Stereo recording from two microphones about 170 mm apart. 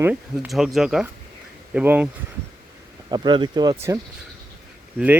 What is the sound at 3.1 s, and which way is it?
Speech, 30° right (ahead or behind).